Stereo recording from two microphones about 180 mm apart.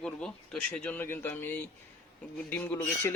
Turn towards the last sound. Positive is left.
turn(degrees=10)  # may be behind; listen again after turning